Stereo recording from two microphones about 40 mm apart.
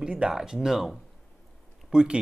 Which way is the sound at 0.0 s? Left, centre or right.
Right.